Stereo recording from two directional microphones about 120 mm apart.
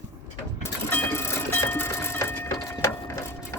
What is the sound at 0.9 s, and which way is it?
Train, 15° left (ahead or behind).